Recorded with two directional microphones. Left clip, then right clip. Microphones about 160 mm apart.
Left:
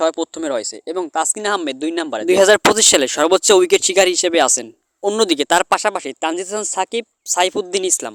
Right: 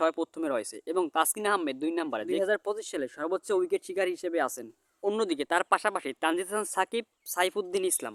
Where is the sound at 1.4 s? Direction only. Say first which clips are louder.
Left 8 dB; 35° left (ahead or behind).